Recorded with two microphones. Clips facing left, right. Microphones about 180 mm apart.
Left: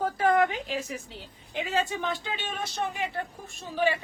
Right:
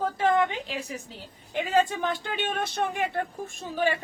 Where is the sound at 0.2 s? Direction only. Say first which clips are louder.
Left 1 dB; 25° right (ahead or behind).